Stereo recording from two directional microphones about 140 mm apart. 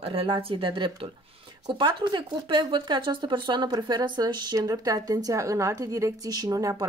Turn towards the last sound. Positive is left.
turn(degrees=-25)  # may be behind; listen again after turning